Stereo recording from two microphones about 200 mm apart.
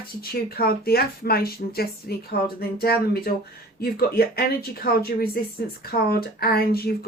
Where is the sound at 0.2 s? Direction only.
50° left (ahead or behind).